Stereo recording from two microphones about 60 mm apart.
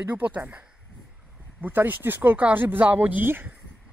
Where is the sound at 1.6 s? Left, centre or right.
Right.